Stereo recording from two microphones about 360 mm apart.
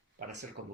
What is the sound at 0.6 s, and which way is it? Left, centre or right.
Speech, right.